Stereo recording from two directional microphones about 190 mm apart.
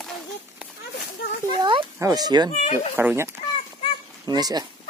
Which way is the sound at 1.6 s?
25° right (ahead or behind).